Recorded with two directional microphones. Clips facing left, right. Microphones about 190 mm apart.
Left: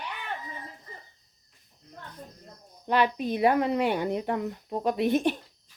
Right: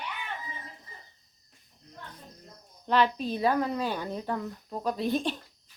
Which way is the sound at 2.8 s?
15° left (ahead or behind).